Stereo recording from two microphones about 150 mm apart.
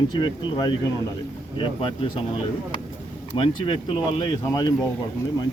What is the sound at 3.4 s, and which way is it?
Speech, 35° left (ahead or behind).